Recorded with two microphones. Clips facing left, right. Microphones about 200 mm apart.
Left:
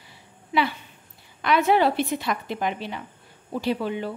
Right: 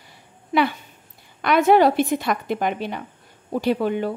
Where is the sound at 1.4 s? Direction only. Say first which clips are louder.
Right 4 dB; 50° right (ahead or behind).